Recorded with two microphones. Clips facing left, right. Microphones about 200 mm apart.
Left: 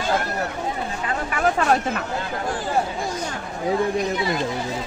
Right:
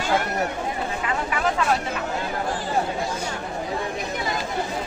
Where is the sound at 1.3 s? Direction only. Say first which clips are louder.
Left 4 dB; 50° left (ahead or behind).